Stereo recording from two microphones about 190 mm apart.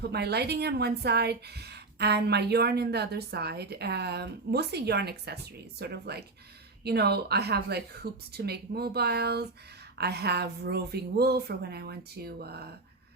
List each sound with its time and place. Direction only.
0.0 s speech: 60° right (ahead or behind)